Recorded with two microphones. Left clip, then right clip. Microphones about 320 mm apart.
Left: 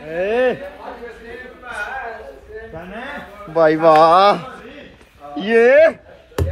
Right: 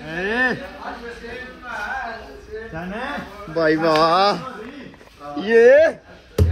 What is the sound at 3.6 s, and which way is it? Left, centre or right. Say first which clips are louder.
Speech: left 6 dB; centre.